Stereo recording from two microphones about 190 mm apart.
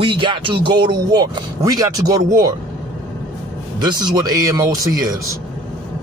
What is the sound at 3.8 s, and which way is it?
Speech, 20° right (ahead or behind).